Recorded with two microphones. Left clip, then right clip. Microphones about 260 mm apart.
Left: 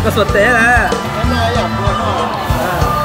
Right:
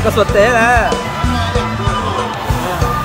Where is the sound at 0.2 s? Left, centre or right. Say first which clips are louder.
Even; right.